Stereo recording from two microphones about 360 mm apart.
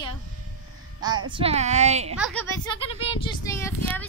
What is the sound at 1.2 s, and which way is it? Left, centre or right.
Speech, centre.